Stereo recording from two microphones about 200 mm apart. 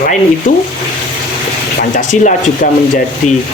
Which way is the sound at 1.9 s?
40° left (ahead or behind).